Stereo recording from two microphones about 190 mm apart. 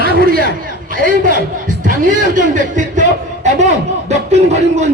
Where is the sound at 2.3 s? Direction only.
40° right (ahead or behind).